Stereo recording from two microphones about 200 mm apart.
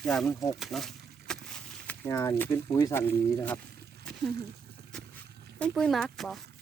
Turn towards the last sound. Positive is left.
turn(degrees=0)  # may be behind; listen again after turning